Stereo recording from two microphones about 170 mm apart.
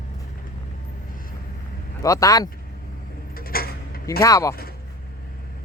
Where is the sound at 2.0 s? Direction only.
20° left (ahead or behind).